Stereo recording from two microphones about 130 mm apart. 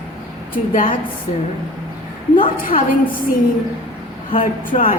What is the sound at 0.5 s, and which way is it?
Speech, 90° left.